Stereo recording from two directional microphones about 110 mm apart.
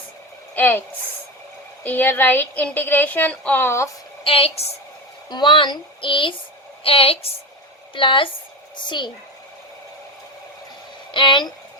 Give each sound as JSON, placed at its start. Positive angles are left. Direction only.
{"t": 0.5, "sound": "a woman's voice", "side_deg": 20}
{"t": 4.2, "sound": "a woman's voice", "side_deg": 60}
{"t": 5.3, "sound": "a woman's voice", "side_deg": 45}
{"t": 11.1, "sound": "speech", "side_deg": 50}